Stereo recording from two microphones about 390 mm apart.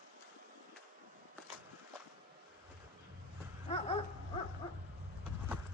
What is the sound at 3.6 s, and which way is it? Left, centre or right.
Dog, centre.